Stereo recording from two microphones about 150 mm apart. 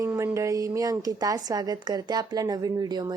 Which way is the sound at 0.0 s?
20° right (ahead or behind).